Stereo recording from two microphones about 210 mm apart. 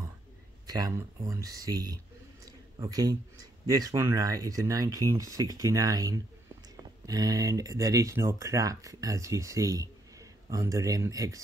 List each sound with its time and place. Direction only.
0.7 s speech: 15° right (ahead or behind)